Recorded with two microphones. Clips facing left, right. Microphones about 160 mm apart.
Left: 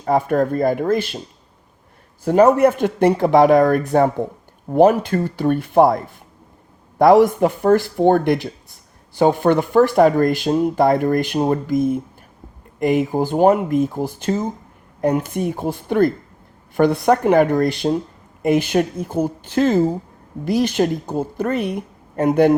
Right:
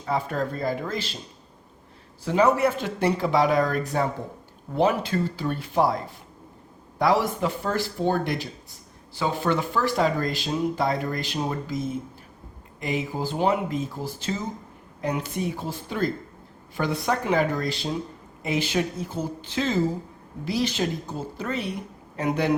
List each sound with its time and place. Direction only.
0.0 s speech: 55° left (ahead or behind)
2.2 s a woman's voice: 50° left (ahead or behind)
7.0 s a woman's voice: 55° left (ahead or behind)